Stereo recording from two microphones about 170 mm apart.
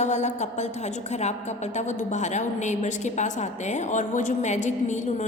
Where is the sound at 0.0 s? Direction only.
40° left (ahead or behind).